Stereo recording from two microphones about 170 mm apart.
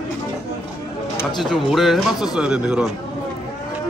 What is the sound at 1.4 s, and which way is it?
Speech, centre (ahead or behind).